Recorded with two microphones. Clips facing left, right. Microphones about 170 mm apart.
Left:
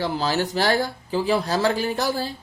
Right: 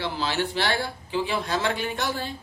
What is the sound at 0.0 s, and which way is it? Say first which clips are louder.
Speech: left 4 dB; 40° left (ahead or behind).